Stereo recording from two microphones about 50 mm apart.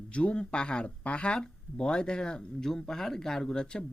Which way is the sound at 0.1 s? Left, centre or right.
Left.